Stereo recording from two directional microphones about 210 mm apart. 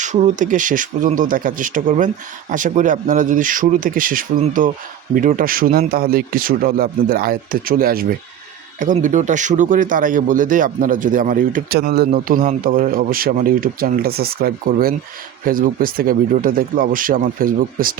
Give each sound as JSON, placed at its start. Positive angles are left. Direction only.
{"t": 0.0, "sound": "a man's voice", "side_deg": -35}